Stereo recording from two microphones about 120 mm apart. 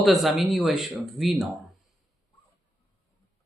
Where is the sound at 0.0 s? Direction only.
Centre (ahead or behind).